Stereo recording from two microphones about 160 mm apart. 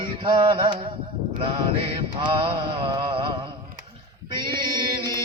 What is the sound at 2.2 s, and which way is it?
Mantra, 30° right (ahead or behind).